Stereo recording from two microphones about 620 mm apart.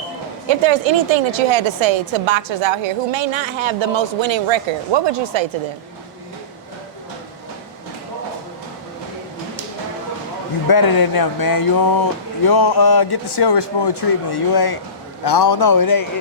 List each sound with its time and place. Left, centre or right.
0.4 s a woman's voice: right
10.7 s a man's voice: left